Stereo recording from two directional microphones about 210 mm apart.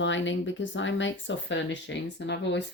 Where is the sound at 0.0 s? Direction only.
60° left (ahead or behind).